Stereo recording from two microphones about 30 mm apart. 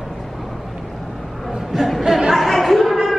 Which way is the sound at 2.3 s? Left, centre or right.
Centre.